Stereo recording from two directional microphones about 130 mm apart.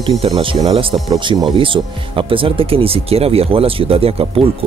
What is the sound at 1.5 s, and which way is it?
Speech, 40° right (ahead or behind).